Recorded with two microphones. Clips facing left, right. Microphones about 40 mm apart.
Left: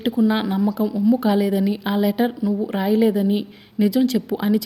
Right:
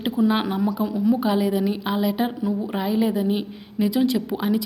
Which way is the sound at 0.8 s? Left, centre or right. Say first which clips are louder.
Left 3 dB; right.